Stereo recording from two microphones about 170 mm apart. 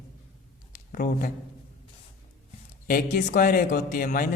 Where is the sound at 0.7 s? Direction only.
55° left (ahead or behind).